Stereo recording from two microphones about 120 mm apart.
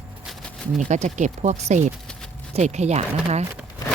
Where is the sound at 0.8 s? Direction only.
80° right; by 3.4 s 65° right (ahead or behind).